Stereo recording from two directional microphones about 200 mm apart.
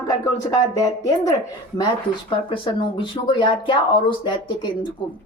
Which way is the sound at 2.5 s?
25° left (ahead or behind).